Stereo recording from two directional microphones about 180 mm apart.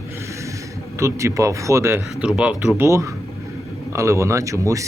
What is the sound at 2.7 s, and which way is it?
Speech, 15° right (ahead or behind).